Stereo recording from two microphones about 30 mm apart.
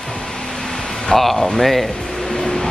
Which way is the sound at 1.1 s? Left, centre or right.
Centre.